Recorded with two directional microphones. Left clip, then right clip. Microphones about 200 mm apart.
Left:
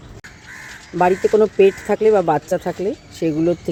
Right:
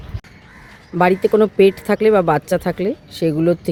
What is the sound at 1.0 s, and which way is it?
Speech, 20° right (ahead or behind).